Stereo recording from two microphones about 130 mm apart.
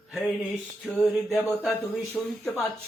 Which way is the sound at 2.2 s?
Centre (ahead or behind).